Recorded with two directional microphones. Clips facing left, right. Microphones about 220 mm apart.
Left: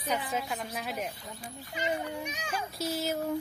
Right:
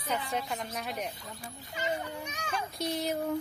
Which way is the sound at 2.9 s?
5° left (ahead or behind).